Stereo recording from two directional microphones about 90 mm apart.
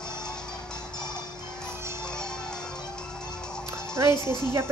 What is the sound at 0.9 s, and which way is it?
Music, 50° left (ahead or behind).